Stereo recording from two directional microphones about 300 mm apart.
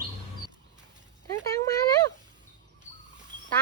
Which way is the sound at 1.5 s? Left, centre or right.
Centre.